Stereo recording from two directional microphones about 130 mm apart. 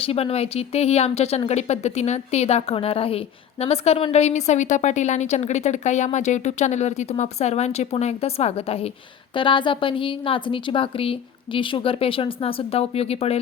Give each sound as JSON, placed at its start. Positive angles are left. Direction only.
{"t": 0.0, "sound": "a woman's voice", "side_deg": 50}
{"t": 9.3, "sound": "a woman's voice", "side_deg": 40}